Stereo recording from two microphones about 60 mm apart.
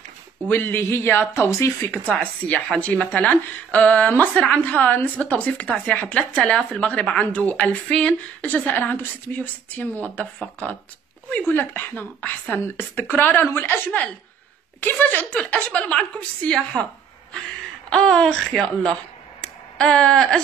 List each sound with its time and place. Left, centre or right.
0.5 s speech: left
1.9 s speech: left
2.1 s speech: left
15.3 s speech: centre
17.8 s speech: centre
19.4 s a sound: centre